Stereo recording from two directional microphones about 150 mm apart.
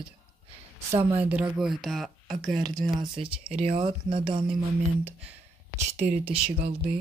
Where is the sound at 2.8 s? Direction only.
30° right (ahead or behind).